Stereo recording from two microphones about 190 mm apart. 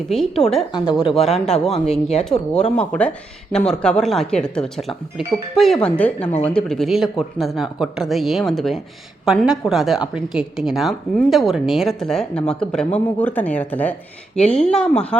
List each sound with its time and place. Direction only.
1.0 s a man's voice: 30° left (ahead or behind)
1.5 s a woman's voice: centre (ahead or behind)
1.9 s a man's voice: 35° left (ahead or behind)
2.5 s a woman's voice: 5° left (ahead or behind)